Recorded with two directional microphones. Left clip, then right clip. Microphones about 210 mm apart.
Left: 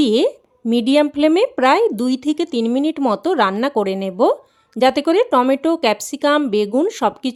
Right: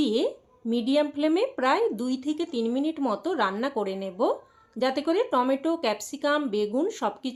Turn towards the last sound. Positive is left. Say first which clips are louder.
# left 10 dB
turn(degrees=50)  # may be behind; listen again after turning